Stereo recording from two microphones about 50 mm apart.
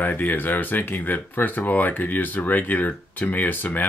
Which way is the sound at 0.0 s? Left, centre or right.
Left.